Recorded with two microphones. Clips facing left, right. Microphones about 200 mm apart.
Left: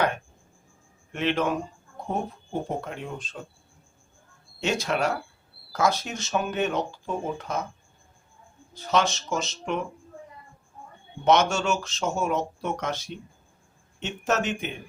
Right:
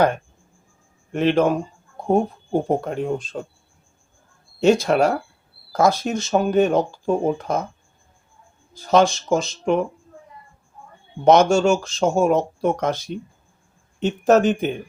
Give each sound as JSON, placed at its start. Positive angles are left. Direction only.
{"t": 1.1, "sound": "speech", "side_deg": -40}
{"t": 4.8, "sound": "speech", "side_deg": -40}
{"t": 8.9, "sound": "speech", "side_deg": -35}
{"t": 11.5, "sound": "speech", "side_deg": -35}